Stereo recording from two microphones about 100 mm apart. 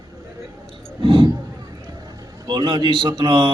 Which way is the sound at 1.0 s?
55° right (ahead or behind).